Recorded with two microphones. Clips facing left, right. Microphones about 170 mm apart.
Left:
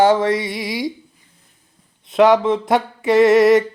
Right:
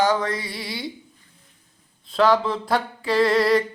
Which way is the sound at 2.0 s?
20° left (ahead or behind).